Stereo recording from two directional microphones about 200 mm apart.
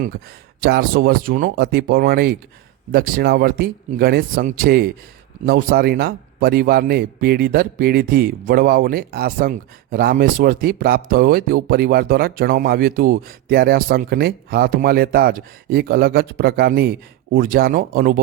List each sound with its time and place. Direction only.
0.6 s a man's voice: 50° right (ahead or behind)